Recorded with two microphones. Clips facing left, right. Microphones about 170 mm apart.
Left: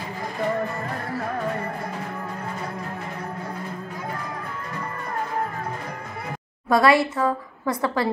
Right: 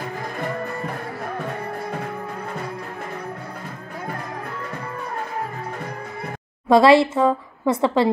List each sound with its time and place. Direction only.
6.7 s a woman's voice: 25° right (ahead or behind)